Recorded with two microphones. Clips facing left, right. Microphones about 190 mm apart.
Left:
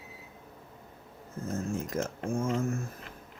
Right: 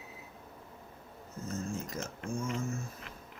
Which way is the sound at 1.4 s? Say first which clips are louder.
Left 4 dB; 50° left (ahead or behind).